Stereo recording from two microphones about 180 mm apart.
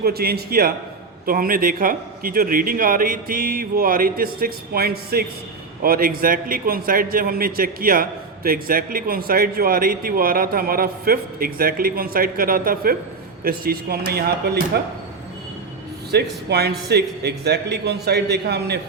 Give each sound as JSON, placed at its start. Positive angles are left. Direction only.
{"t": 0.0, "sound": "a man's voice", "side_deg": -60}
{"t": 16.1, "sound": "a man's voice", "side_deg": -65}